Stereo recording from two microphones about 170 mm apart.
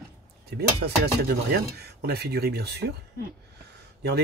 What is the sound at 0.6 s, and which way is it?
Speech, 70° right (ahead or behind).